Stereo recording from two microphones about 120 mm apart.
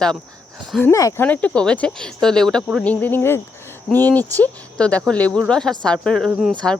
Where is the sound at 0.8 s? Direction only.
25° left (ahead or behind).